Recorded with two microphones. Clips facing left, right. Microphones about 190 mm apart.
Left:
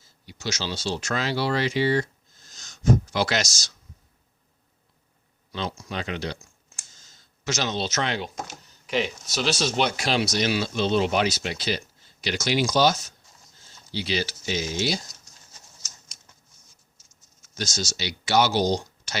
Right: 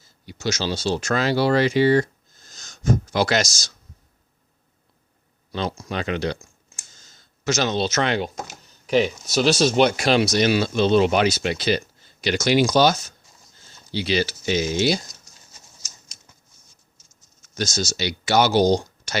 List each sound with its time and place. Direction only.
0.3 s speech: 50° right (ahead or behind)
5.5 s speech: 45° right (ahead or behind); by 6.4 s 60° right (ahead or behind)
7.4 s speech: 50° right (ahead or behind)
8.9 s speech: 40° right (ahead or behind); by 14.9 s 65° right (ahead or behind)
17.6 s speech: 50° right (ahead or behind)